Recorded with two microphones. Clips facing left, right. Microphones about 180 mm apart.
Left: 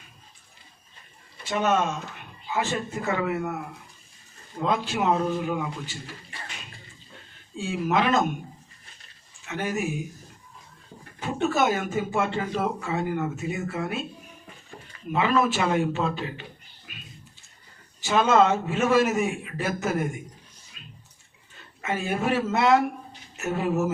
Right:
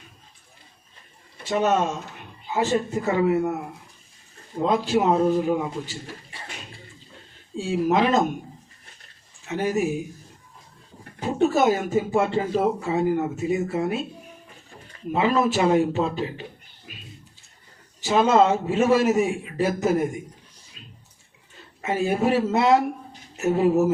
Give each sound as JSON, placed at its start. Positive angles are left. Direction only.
{"t": 1.5, "sound": "speech", "side_deg": -35}
{"t": 4.5, "sound": "speech", "side_deg": -35}
{"t": 7.5, "sound": "speech", "side_deg": -35}
{"t": 9.5, "sound": "speech", "side_deg": -35}
{"t": 11.2, "sound": "speech", "side_deg": -35}
{"t": 15.1, "sound": "speech", "side_deg": -35}
{"t": 16.9, "sound": "a sound", "side_deg": -30}
{"t": 18.0, "sound": "speech", "side_deg": -35}
{"t": 20.7, "sound": "bathtub", "side_deg": -30}
{"t": 21.8, "sound": "speech", "side_deg": -35}